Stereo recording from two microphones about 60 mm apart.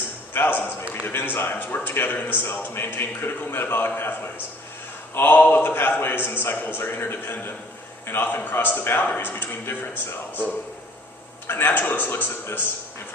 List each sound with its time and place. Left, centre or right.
0.3 s a man's voice: left
11.4 s a man's voice: left